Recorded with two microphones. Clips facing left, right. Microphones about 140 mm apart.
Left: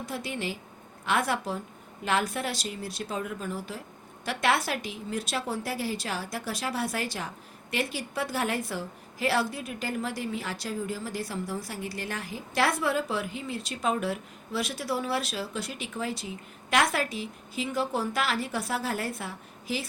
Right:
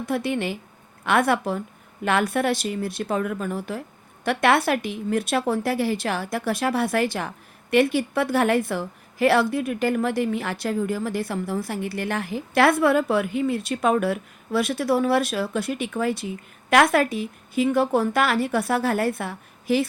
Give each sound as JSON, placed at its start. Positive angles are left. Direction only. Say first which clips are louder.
{"t": 0.0, "sound": "a woman's voice", "louder": "right 9 dB", "side_deg": -60}